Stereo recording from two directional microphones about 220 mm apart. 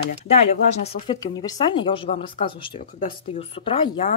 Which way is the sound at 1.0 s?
20° left (ahead or behind).